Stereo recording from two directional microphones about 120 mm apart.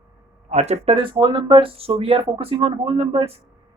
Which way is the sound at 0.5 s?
65° right (ahead or behind).